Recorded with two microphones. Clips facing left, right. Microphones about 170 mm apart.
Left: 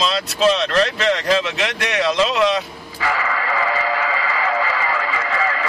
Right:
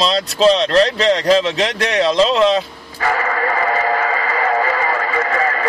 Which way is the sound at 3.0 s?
50° right (ahead or behind).